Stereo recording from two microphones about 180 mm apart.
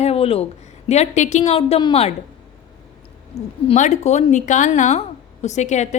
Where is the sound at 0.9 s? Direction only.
40° left (ahead or behind).